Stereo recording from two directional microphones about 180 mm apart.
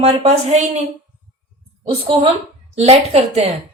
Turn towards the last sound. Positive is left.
turn(degrees=-35)  # may be behind; listen again after turning